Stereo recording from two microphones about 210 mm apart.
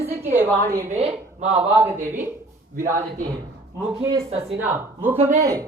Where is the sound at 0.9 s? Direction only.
30° right (ahead or behind).